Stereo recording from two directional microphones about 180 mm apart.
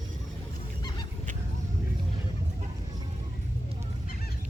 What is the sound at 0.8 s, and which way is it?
Goose, 20° left (ahead or behind).